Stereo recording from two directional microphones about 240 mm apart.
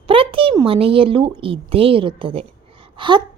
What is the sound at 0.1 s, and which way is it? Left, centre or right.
A woman's voice, right.